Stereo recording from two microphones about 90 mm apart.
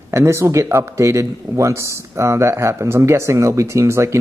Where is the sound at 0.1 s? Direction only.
30° right (ahead or behind).